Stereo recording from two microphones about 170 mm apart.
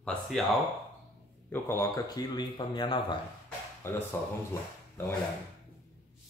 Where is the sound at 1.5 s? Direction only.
15° left (ahead or behind).